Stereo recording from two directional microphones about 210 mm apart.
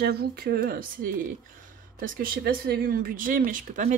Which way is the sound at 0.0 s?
50° right (ahead or behind).